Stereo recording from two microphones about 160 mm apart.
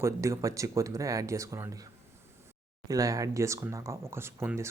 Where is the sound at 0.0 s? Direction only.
20° right (ahead or behind).